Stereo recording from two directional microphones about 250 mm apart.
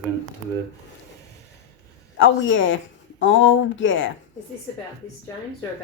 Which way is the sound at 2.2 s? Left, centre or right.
Left.